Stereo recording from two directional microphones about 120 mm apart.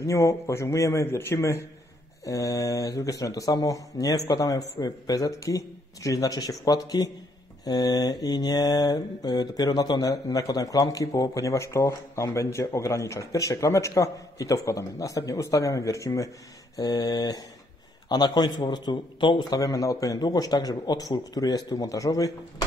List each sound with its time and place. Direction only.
0.0 s mantra: 25° left (ahead or behind)
4.3 s a man's voice: 30° left (ahead or behind)
7.6 s mantra: 30° left (ahead or behind)
16.7 s a man's voice: 30° left (ahead or behind)